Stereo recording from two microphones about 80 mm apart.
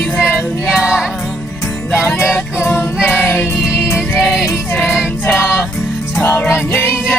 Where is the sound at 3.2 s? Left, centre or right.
Left.